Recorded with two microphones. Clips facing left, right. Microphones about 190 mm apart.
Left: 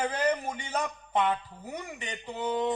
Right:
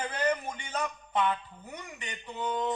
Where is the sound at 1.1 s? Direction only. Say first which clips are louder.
Left 2 dB; 35° left (ahead or behind).